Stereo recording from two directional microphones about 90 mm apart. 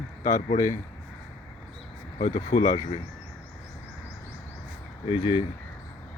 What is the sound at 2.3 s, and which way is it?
Speech, 45° left (ahead or behind).